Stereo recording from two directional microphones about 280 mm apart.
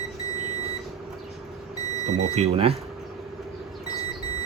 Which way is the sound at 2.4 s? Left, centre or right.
Right.